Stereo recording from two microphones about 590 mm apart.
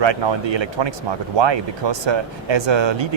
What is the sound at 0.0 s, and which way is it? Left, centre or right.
Speech, right.